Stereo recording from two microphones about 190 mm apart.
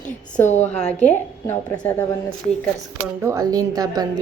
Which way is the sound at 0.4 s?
35° left (ahead or behind).